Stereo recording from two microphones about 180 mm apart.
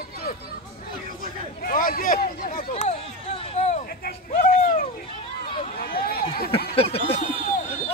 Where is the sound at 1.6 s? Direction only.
50° left (ahead or behind).